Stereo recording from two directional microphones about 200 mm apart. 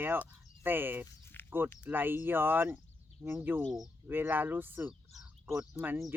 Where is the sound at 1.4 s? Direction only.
10° left (ahead or behind).